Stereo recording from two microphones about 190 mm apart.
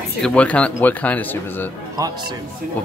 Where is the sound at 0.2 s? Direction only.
5° left (ahead or behind).